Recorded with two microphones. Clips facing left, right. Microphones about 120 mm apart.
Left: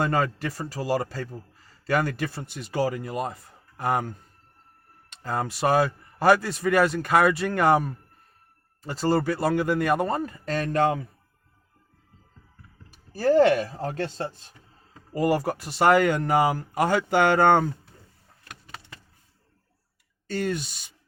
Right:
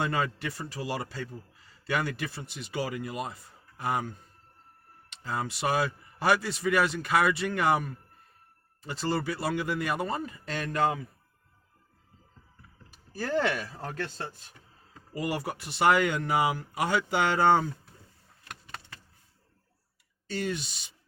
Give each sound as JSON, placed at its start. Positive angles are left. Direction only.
{"t": 0.0, "sound": "a man's voice", "side_deg": 45}
{"t": 13.1, "sound": "a man's voice", "side_deg": 40}
{"t": 20.2, "sound": "a man's voice", "side_deg": 45}